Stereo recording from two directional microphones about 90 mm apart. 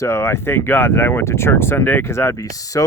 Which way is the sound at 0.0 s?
30° left (ahead or behind).